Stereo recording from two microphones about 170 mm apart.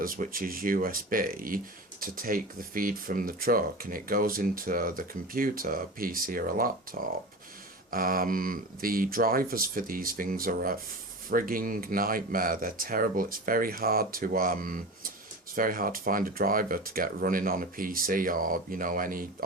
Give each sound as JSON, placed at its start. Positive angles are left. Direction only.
{"t": 0.0, "sound": "speech", "side_deg": -55}